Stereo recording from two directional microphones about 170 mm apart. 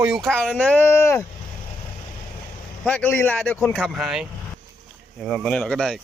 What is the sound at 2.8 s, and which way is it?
Speech, 10° left (ahead or behind).